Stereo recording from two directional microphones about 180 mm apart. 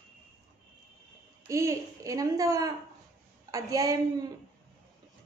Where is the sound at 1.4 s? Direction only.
15° right (ahead or behind).